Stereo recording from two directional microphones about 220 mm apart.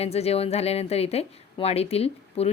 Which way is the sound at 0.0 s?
30° left (ahead or behind).